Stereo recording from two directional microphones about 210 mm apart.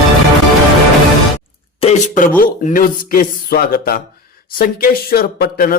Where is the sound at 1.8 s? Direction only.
30° left (ahead or behind).